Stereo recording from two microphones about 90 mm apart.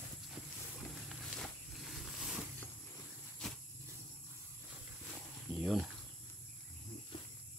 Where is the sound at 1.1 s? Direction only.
Centre (ahead or behind).